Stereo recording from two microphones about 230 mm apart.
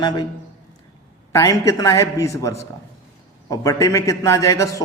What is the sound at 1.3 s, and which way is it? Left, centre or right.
A man's voice, centre.